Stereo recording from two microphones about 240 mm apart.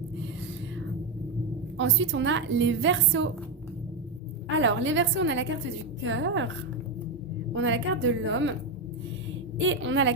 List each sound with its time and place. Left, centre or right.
1.8 s a woman's voice: right
4.4 s a woman's voice: right
7.5 s a woman's voice: right
9.6 s a woman's voice: right